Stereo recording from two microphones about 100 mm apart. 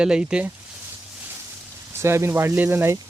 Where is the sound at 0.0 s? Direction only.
10° right (ahead or behind).